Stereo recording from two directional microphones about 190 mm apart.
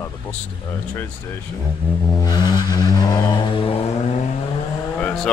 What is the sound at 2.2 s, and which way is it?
Didgeridoo, 20° left (ahead or behind).